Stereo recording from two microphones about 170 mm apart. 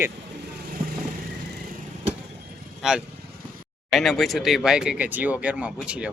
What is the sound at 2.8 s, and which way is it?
Speech, 5° right (ahead or behind).